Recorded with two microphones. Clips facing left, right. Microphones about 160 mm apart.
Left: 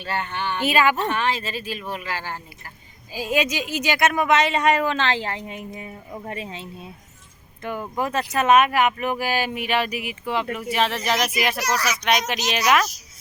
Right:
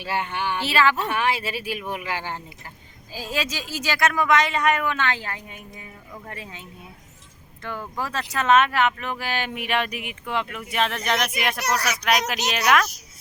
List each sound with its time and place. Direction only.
0.0 s speech: 10° right (ahead or behind)
0.6 s speech: 15° left (ahead or behind)
0.9 s speech: 10° right (ahead or behind)
3.1 s speech: 15° left (ahead or behind)